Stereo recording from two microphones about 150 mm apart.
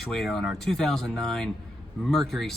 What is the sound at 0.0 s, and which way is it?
Speech, centre (ahead or behind).